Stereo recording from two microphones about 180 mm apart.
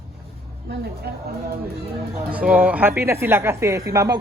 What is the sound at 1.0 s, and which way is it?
Speech, 65° right (ahead or behind).